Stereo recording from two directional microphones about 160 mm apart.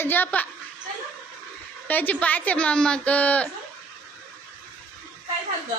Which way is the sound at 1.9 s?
10° left (ahead or behind).